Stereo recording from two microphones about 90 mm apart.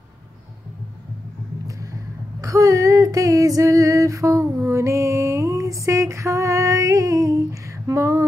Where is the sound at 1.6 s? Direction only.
40° right (ahead or behind).